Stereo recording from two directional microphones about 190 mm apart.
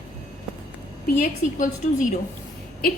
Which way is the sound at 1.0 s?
40° left (ahead or behind).